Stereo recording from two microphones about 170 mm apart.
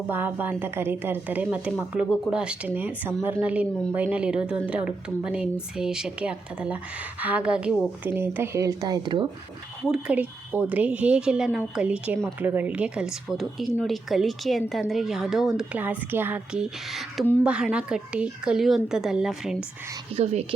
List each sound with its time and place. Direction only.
0.1 s a woman's voice: 10° right (ahead or behind)
9.9 s speech: 10° right (ahead or behind)
20.1 s speech: 35° right (ahead or behind)